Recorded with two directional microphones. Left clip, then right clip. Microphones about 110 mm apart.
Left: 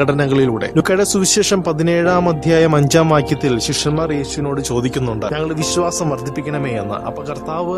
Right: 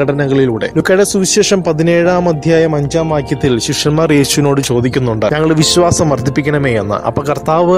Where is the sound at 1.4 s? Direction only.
30° right (ahead or behind).